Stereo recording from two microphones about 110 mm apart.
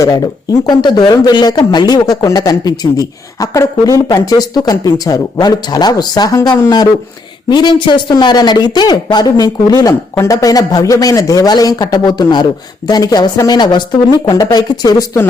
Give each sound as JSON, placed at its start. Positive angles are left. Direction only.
{"t": 0.7, "sound": "speech", "side_deg": 40}